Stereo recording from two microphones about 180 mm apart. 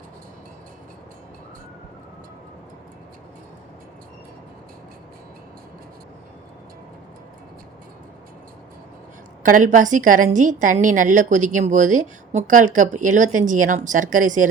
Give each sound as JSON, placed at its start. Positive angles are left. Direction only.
{"t": 9.4, "sound": "a woman's voice", "side_deg": -45}